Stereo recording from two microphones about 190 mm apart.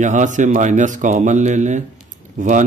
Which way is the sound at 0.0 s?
40° right (ahead or behind).